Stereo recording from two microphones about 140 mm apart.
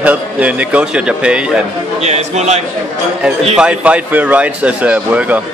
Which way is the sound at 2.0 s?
55° right (ahead or behind).